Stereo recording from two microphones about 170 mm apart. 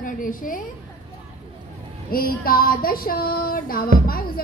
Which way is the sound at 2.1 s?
60° left (ahead or behind).